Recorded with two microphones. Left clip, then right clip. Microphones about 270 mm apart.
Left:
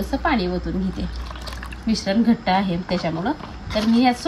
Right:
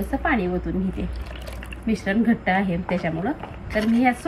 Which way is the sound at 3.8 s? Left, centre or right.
Centre.